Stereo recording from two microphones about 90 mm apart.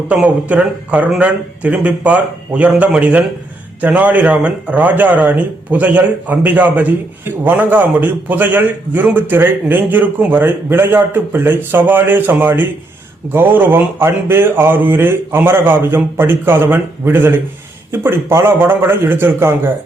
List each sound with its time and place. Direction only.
0.4 s a man's voice: 15° right (ahead or behind)